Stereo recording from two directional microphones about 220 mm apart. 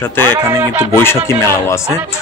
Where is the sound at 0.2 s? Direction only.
15° right (ahead or behind).